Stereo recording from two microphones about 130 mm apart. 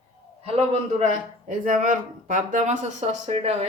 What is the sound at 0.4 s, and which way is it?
Speech, 55° right (ahead or behind).